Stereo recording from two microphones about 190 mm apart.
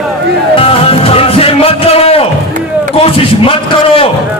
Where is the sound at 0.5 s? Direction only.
30° left (ahead or behind).